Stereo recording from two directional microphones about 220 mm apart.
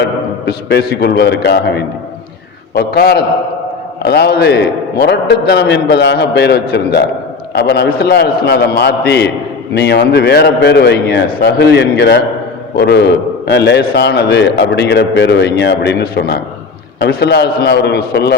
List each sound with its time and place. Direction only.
0.0 s a man's voice: 50° left (ahead or behind)